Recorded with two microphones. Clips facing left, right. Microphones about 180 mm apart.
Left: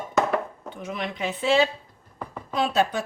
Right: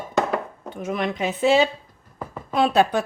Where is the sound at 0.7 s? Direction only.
50° right (ahead or behind).